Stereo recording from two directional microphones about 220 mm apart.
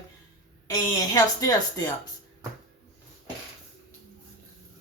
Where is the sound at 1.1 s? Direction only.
15° left (ahead or behind).